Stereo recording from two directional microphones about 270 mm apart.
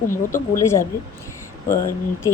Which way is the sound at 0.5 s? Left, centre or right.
Centre.